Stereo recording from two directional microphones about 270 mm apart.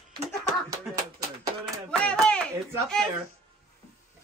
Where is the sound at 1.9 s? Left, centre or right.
Centre.